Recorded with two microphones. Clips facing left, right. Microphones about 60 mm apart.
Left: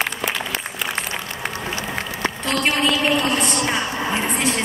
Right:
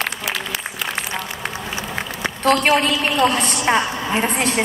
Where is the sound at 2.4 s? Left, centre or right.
Right.